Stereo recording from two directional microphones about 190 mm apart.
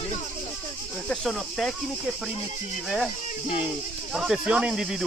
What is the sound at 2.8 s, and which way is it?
Speech, centre (ahead or behind).